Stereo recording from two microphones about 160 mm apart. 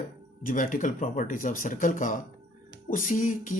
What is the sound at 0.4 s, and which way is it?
Speech, 55° left (ahead or behind).